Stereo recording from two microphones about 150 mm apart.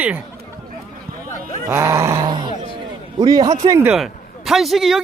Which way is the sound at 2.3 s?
30° right (ahead or behind).